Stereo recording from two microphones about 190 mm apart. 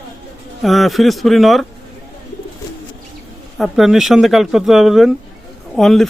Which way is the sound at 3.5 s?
Centre (ahead or behind).